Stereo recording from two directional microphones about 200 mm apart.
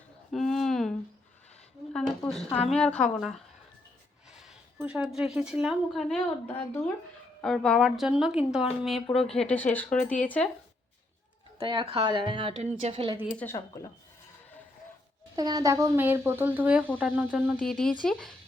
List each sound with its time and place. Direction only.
0.3 s a sound: centre (ahead or behind)
1.9 s speech: 5° left (ahead or behind)
11.5 s a woman's voice: 25° right (ahead or behind)
13.3 s speech: 10° left (ahead or behind)
15.4 s speech: 20° right (ahead or behind)
17.3 s speech: 5° left (ahead or behind)